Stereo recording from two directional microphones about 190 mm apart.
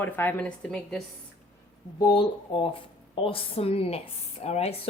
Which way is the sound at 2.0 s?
25° left (ahead or behind).